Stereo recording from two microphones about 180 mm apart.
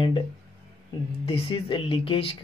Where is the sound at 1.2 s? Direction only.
30° left (ahead or behind).